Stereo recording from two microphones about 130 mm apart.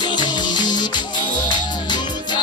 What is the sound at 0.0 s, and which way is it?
Music, 35° left (ahead or behind).